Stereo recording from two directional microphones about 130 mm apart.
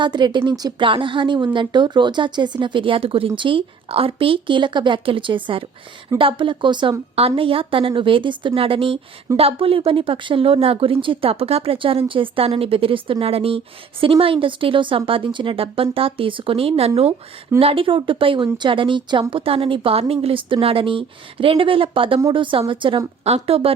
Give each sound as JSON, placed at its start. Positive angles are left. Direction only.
{"t": 0.0, "sound": "a woman's voice", "side_deg": -35}
{"t": 23.2, "sound": "a woman's voice", "side_deg": -50}